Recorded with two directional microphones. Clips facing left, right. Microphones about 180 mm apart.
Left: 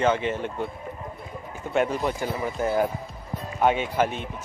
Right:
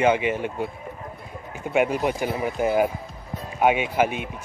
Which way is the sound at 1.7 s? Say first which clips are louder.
Right 2 dB; 10° right (ahead or behind).